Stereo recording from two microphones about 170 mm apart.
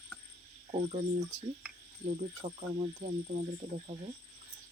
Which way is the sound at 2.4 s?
30° right (ahead or behind).